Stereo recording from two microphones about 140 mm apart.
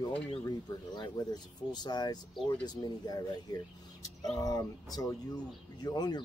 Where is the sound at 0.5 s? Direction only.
30° left (ahead or behind).